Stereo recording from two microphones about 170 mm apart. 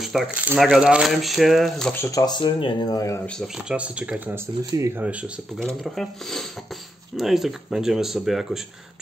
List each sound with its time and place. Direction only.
0.0 s a sound: centre (ahead or behind)
0.6 s speech: 5° right (ahead or behind)
2.0 s speech: 20° left (ahead or behind)
3.3 s speech: 5° left (ahead or behind)
3.7 s speech: 5° right (ahead or behind)
4.7 s speech: 20° right (ahead or behind)
5.0 s speech: 5° right (ahead or behind)